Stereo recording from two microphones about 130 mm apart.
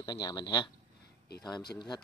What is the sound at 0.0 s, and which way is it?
Speech, 30° left (ahead or behind).